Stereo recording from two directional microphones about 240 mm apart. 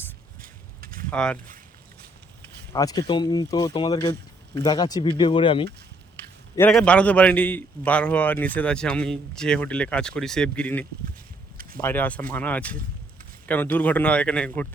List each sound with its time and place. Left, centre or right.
0.4 s a sound: right
1.1 s a man's voice: centre
2.7 s speech: centre
6.6 s a man's voice: centre